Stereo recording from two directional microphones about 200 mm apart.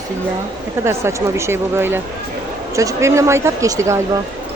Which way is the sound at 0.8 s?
15° right (ahead or behind).